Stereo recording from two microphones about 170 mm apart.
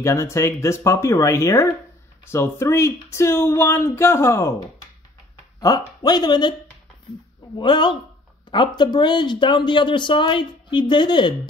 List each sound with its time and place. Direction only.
0.0 s speech: 15° left (ahead or behind)
5.6 s speech: 25° left (ahead or behind)
7.5 s speech: 25° left (ahead or behind)